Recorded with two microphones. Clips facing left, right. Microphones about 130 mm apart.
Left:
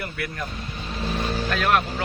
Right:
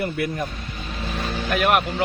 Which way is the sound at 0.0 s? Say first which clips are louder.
Right 7 dB; 25° right (ahead or behind).